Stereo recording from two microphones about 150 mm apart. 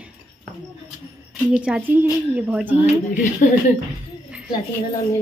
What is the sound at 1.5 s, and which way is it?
A woman's voice, 5° right (ahead or behind).